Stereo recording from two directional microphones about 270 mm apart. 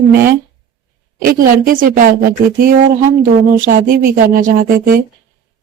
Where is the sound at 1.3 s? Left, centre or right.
Right.